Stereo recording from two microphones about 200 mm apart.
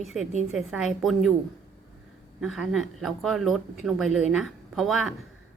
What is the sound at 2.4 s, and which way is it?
A woman's voice, centre (ahead or behind).